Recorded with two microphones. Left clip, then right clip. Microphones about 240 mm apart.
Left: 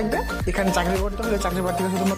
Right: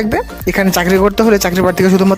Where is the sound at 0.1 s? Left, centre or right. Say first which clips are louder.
Right 9 dB; right.